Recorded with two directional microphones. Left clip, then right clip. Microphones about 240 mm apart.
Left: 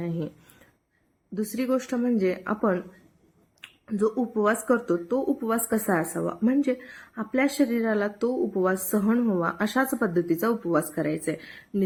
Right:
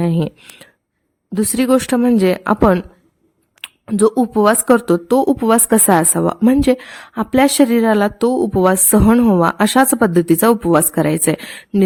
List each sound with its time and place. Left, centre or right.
0.0 s speech: right